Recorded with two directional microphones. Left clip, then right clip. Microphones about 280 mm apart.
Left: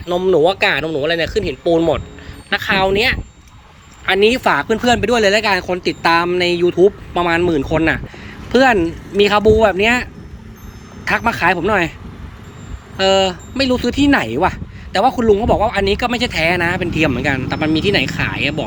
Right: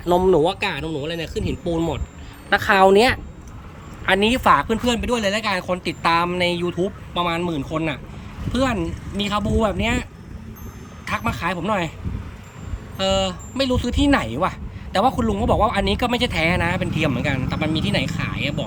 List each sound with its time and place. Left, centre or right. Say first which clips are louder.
0.1 s speech: left 3 dB; centre
2.5 s a woman's voice: right 1 dB; right; by 11.9 s centre
13.0 s speech: left 7 dB; centre